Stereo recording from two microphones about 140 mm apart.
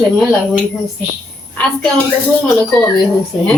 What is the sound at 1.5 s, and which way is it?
Speech, 10° left (ahead or behind).